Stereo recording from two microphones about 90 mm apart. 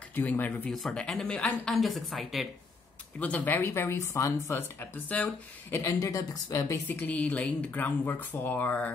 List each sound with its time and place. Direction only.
0.1 s speech: 20° left (ahead or behind)
0.7 s speech: 5° left (ahead or behind)
3.2 s speech: 15° left (ahead or behind); by 4.6 s 30° left (ahead or behind)
4.6 s speech: 20° left (ahead or behind)
5.8 s a woman's voice: 35° left (ahead or behind)
6.9 s speech: 20° left (ahead or behind)